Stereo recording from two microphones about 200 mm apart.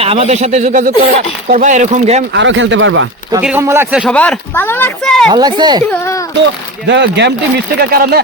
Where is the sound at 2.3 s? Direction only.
65° right (ahead or behind).